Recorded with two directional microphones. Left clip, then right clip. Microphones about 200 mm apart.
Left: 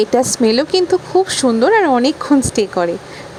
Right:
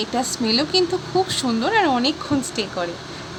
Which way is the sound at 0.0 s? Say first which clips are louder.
Left 10 dB; 40° left (ahead or behind).